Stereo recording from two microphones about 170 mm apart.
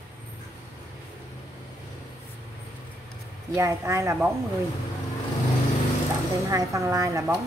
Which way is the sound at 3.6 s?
15° right (ahead or behind).